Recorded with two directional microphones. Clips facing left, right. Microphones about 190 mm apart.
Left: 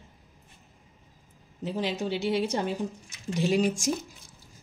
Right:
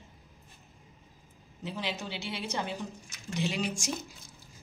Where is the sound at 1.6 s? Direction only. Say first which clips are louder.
Left 7 dB; 45° left (ahead or behind).